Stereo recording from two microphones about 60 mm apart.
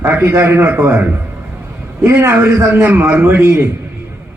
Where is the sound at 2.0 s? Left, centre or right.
Right.